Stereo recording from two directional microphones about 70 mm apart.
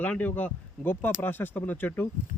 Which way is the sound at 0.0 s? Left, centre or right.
Left.